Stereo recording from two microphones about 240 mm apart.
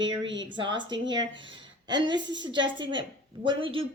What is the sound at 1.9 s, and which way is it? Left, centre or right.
A woman's voice, centre.